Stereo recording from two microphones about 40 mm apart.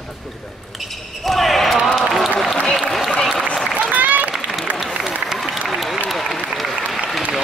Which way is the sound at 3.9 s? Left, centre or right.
Right.